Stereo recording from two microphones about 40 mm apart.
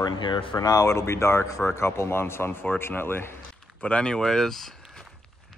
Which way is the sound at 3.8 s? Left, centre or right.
Left.